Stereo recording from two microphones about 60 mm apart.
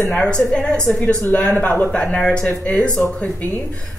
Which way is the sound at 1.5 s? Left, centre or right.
Left.